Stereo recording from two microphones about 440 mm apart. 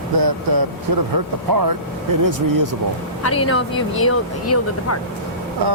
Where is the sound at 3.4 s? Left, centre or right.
Left.